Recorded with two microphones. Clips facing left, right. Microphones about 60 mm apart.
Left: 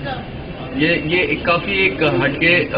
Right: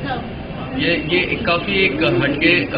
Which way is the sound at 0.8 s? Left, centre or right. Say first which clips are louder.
Left 2 dB; centre.